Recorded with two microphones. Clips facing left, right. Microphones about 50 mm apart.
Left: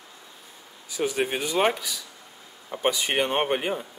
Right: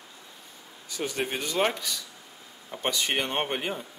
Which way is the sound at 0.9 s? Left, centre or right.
Centre.